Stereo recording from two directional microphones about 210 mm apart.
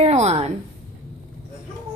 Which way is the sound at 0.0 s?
30° right (ahead or behind).